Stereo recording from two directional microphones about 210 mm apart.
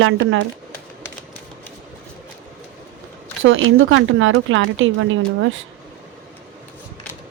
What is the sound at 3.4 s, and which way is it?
A woman's voice, 70° right (ahead or behind).